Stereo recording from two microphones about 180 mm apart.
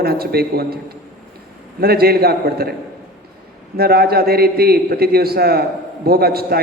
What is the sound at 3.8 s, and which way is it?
A man's voice, 60° right (ahead or behind).